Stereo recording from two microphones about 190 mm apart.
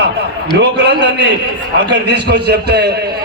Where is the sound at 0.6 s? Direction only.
65° right (ahead or behind).